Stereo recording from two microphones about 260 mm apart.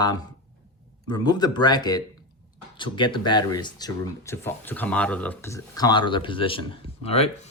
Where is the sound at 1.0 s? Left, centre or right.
Centre.